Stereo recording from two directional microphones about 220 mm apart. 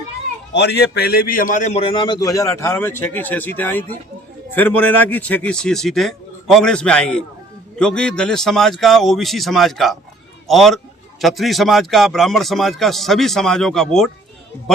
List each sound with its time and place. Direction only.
0.5 s a man's voice: 50° left (ahead or behind); by 14.1 s centre (ahead or behind)